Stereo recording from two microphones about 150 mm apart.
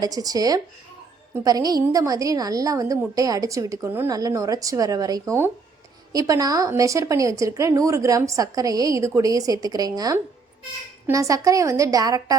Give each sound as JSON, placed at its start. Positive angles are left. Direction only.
{"t": 0.0, "sound": "speech", "side_deg": -25}